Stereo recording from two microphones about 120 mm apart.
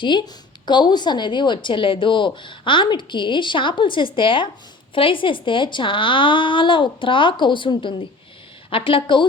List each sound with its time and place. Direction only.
0.0 s a woman's voice: 40° left (ahead or behind)